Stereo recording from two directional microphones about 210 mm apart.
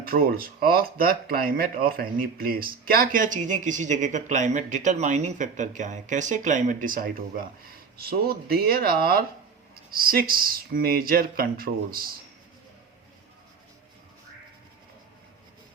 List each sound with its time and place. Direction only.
0.0 s speech: 45° right (ahead or behind)